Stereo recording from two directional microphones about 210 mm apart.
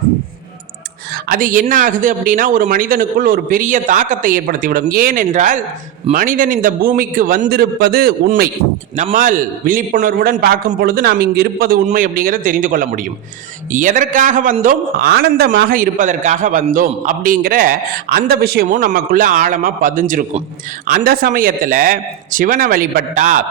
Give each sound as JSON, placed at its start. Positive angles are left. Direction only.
{"t": 1.1, "sound": "a man's voice", "side_deg": -40}